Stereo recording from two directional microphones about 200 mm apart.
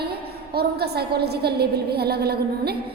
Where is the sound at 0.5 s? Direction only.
55° right (ahead or behind).